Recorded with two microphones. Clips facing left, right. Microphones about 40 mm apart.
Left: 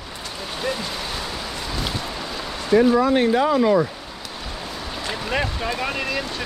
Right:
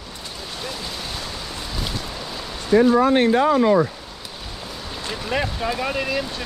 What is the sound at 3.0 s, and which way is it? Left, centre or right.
Speech, right.